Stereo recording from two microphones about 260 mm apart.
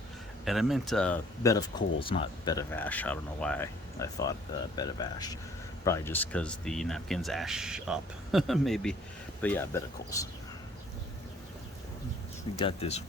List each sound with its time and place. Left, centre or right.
0.4 s speech: centre
12.6 s speech: left